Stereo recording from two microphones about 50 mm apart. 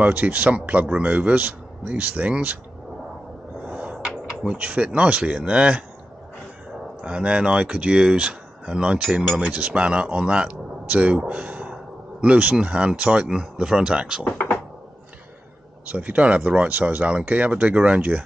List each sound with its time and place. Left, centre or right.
0.0 s speech: right
3.6 s a sound: right
4.6 s speech: right
7.0 s speech: centre
9.4 s speech: right
11.0 s a sound: right
12.6 s speech: right
15.9 s speech: right